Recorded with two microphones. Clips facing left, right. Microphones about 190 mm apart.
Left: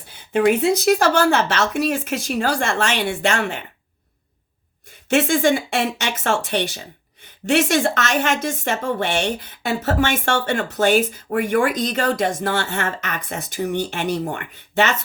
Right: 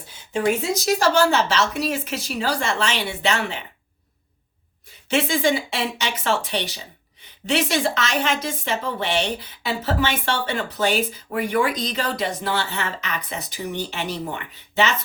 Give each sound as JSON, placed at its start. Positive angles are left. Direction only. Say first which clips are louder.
{"t": 0.3, "sound": "a woman's voice", "louder": "left 5 dB", "side_deg": 60}
{"t": 5.0, "sound": "a woman's voice", "louder": "left 4 dB", "side_deg": 50}